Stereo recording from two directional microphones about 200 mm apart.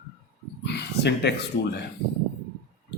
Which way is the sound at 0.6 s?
55° left (ahead or behind).